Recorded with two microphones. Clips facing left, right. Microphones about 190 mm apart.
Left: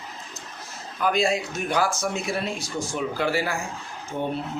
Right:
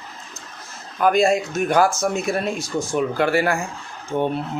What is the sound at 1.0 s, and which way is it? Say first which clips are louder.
A man's voice: right 6 dB; 50° right (ahead or behind).